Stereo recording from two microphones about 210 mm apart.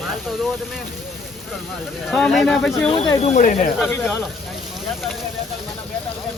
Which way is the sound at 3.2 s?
35° left (ahead or behind).